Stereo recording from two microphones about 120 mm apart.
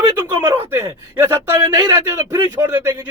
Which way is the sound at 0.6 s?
25° right (ahead or behind).